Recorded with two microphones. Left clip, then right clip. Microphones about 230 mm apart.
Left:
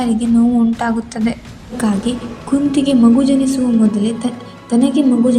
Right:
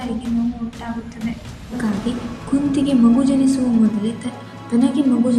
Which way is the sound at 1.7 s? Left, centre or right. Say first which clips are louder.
Left 5 dB; left.